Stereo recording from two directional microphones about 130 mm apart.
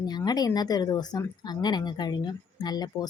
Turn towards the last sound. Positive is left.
turn(degrees=30)  # may be behind; listen again after turning